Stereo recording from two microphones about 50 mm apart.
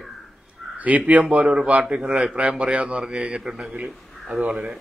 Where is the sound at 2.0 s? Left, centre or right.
Centre.